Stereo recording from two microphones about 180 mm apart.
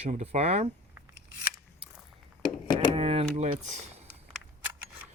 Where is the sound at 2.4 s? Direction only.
25° left (ahead or behind).